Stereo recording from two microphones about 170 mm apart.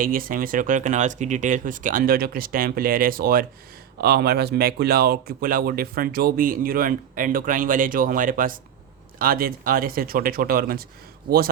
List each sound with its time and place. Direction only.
0.0 s speech: 55° right (ahead or behind)